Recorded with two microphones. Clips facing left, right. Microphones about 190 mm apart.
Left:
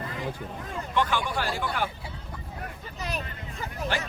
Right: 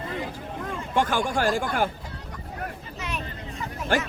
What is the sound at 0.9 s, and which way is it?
Speech, 45° right (ahead or behind).